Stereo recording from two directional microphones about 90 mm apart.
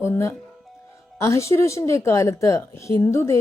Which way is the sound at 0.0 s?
30° left (ahead or behind).